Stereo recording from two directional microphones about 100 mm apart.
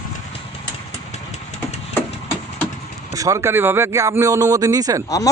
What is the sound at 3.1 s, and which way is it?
Speech, 35° right (ahead or behind).